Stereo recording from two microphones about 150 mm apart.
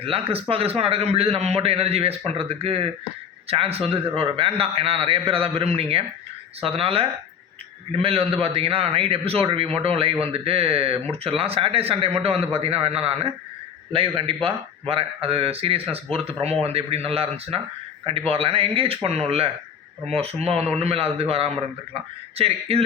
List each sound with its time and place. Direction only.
0.0 s a man's voice: 40° right (ahead or behind)